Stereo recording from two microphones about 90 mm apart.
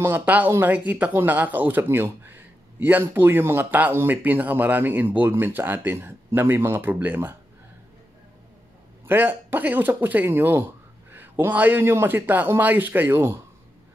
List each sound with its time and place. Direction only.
0.2 s speech: 20° right (ahead or behind)
9.0 s speech: 25° right (ahead or behind)